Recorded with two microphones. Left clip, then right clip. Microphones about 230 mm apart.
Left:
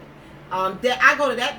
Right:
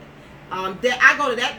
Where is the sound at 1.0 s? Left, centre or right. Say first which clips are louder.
Right 2 dB; right.